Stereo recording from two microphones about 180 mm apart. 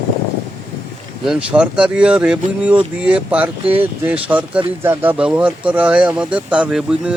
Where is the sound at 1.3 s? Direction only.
5° right (ahead or behind).